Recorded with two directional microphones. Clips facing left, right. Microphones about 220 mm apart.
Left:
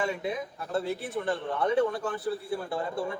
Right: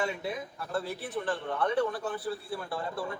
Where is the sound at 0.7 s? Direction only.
25° left (ahead or behind).